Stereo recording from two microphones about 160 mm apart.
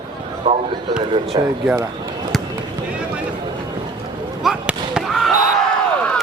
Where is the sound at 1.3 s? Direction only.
30° right (ahead or behind).